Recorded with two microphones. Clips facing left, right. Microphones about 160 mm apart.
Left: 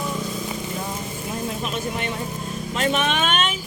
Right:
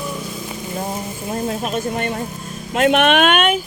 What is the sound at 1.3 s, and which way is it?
Speech, 45° right (ahead or behind).